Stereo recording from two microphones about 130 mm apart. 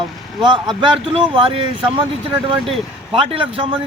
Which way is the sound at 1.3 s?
40° right (ahead or behind).